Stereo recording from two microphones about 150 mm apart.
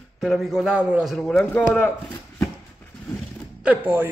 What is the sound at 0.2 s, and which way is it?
Speech, centre (ahead or behind).